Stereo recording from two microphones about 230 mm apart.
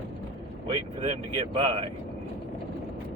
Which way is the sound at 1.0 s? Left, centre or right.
Right.